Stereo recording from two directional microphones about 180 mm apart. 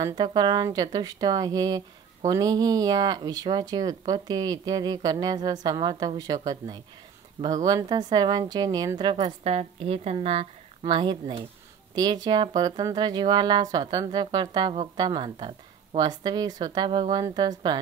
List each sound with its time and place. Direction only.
0.0 s speech: 25° right (ahead or behind)
9.1 s a woman's voice: 35° right (ahead or behind)